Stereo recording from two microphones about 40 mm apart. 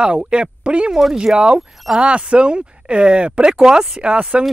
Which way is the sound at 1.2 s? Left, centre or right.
Right.